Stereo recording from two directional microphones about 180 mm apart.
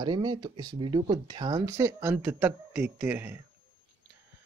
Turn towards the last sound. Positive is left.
turn(degrees=-10)  # may be behind; listen again after turning